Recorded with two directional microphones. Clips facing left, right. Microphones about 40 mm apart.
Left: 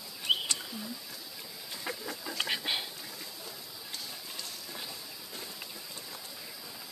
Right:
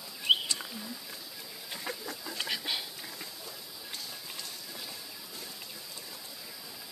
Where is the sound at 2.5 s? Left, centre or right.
Left.